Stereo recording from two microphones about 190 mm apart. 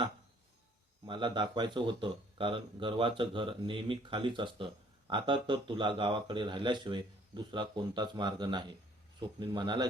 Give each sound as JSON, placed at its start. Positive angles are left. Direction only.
{"t": 1.0, "sound": "speech", "side_deg": -25}